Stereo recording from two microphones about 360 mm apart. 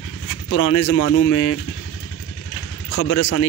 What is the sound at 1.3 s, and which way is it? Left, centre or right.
Speech, left.